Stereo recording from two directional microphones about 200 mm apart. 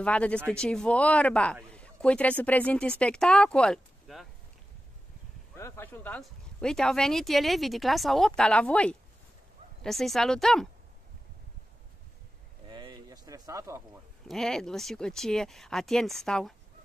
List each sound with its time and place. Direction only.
0.0 s speech: 5° left (ahead or behind)
5.6 s speech: 10° left (ahead or behind)
12.6 s a sound: 25° right (ahead or behind)
14.2 s speech: centre (ahead or behind)